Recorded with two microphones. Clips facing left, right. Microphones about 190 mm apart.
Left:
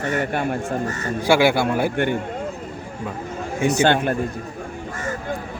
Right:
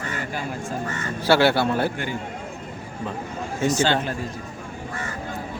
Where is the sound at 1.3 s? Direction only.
10° left (ahead or behind).